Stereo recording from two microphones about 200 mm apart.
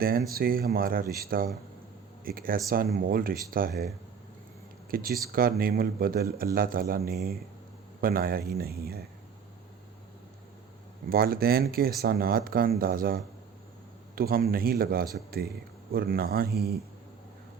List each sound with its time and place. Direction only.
0.3 s speech: 45° right (ahead or behind)
4.9 s speech: 45° right (ahead or behind)
11.1 s speech: 50° right (ahead or behind)
14.2 s speech: 50° right (ahead or behind)